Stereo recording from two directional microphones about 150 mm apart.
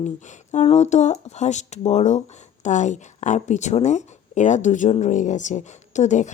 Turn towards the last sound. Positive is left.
turn(degrees=50)  # may be behind; listen again after turning